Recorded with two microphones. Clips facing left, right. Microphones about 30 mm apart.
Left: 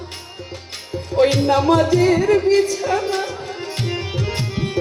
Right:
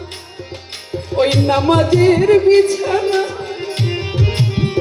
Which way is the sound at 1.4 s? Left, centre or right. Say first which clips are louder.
Right 1 dB; right.